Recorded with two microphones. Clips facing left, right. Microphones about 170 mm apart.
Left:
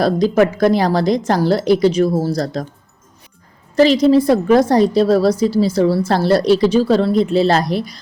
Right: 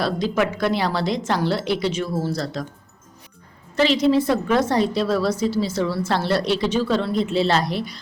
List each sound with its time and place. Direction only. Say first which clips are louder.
0.0 s a woman's voice: left 8 dB; 40° left (ahead or behind)
3.8 s a woman's voice: left 6 dB; 40° left (ahead or behind)